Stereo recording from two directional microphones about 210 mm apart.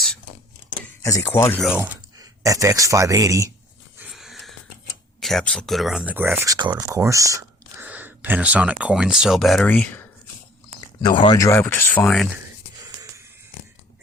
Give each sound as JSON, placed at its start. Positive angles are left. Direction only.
{"t": 0.8, "sound": "speech", "side_deg": 15}
{"t": 1.8, "sound": "speech", "side_deg": -15}
{"t": 3.9, "sound": "wheeze", "side_deg": -5}
{"t": 5.2, "sound": "speech", "side_deg": 0}
{"t": 11.0, "sound": "speech", "side_deg": 20}